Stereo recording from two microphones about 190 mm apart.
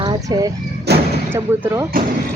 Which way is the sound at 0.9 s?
60° right (ahead or behind).